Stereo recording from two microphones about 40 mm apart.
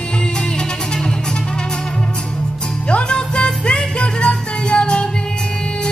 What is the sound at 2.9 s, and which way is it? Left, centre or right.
Music, left.